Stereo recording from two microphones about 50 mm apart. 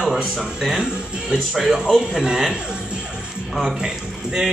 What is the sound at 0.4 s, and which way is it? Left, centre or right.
Speech, centre.